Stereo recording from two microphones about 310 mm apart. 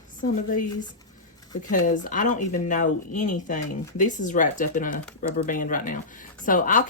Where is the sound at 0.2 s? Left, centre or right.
Left.